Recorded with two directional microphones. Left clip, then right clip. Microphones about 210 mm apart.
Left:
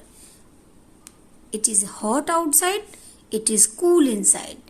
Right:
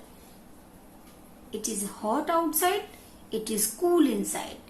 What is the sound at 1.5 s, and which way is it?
A woman's voice, 55° left (ahead or behind).